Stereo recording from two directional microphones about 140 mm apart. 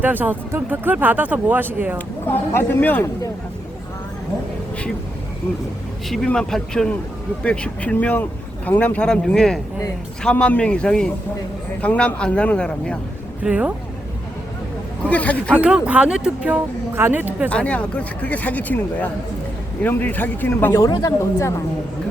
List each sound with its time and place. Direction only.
0.0 s speech: 10° right (ahead or behind)
2.0 s speech: 15° left (ahead or behind)
6.1 s speech: 5° left (ahead or behind)
13.4 s speech: 10° right (ahead or behind)
15.0 s speech: 10° left (ahead or behind)
15.5 s speech: 10° right (ahead or behind)
17.5 s speech: 10° left (ahead or behind)